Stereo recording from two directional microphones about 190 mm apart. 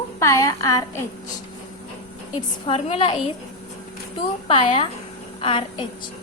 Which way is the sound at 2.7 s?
30° left (ahead or behind).